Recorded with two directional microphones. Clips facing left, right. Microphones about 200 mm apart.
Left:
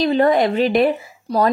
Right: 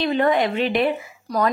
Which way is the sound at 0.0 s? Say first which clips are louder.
Left 4 dB; 35° left (ahead or behind).